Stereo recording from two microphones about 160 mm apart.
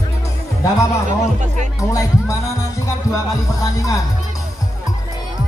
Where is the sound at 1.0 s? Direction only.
50° right (ahead or behind).